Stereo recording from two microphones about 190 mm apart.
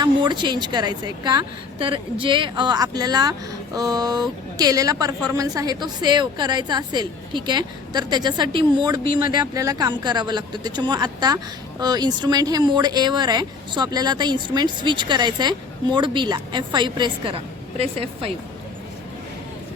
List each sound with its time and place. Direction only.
0.0 s speech: 25° right (ahead or behind)